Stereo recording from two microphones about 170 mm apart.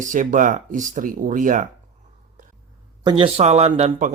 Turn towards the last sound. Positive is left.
turn(degrees=-45)  # may be behind; listen again after turning